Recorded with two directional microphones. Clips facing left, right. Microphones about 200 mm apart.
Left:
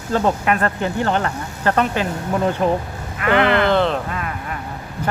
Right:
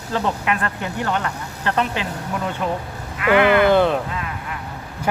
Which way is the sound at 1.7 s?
45° left (ahead or behind).